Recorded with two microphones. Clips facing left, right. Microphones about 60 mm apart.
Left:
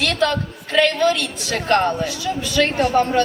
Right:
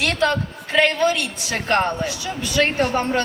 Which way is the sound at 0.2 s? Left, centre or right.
Centre.